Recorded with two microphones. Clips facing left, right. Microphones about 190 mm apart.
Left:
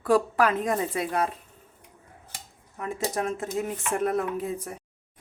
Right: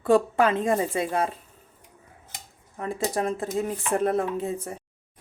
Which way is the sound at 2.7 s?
35° right (ahead or behind).